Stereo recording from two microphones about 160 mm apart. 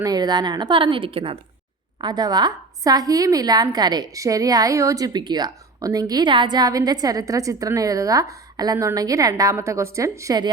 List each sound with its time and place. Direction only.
0.0 s a woman's voice: 25° right (ahead or behind)